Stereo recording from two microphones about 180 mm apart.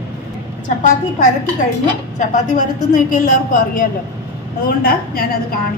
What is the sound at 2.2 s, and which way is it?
A woman's voice, 45° left (ahead or behind).